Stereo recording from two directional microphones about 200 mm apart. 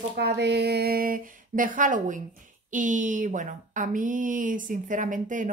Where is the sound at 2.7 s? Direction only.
40° right (ahead or behind).